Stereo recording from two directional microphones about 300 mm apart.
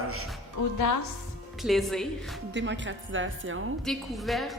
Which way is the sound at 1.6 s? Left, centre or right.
Centre.